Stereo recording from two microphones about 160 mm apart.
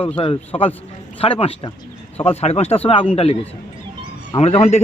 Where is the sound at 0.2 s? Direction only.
35° left (ahead or behind).